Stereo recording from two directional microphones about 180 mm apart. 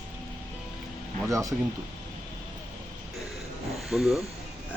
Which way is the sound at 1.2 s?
15° right (ahead or behind).